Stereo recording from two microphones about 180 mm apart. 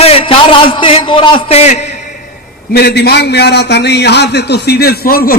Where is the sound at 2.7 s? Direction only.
65° left (ahead or behind).